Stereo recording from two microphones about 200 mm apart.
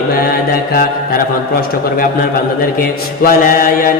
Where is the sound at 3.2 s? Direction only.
45° left (ahead or behind).